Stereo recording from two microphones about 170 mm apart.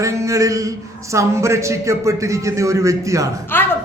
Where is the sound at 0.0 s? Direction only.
20° right (ahead or behind).